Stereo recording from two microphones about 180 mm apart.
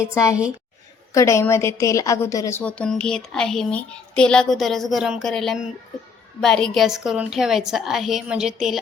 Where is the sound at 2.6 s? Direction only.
5° left (ahead or behind).